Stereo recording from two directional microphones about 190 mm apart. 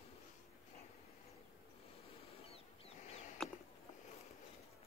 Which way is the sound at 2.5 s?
35° left (ahead or behind).